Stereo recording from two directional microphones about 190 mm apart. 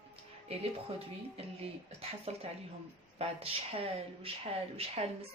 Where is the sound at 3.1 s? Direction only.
30° right (ahead or behind).